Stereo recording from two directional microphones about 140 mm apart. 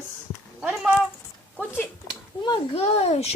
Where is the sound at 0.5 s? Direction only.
5° right (ahead or behind).